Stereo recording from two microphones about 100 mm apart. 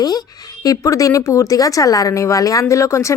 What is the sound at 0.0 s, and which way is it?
Speech, 40° left (ahead or behind).